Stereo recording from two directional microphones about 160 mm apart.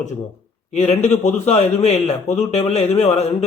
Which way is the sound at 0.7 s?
45° left (ahead or behind).